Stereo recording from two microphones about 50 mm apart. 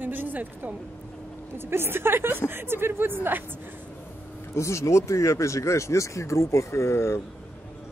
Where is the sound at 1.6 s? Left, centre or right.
Right.